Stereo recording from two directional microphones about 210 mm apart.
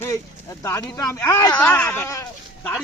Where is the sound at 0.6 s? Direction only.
15° left (ahead or behind).